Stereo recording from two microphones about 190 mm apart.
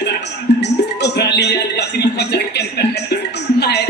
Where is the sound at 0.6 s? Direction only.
60° left (ahead or behind).